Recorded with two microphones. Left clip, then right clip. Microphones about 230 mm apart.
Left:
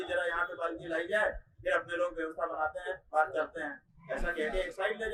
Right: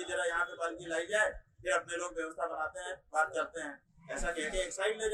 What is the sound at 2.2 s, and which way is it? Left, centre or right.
Speech, right.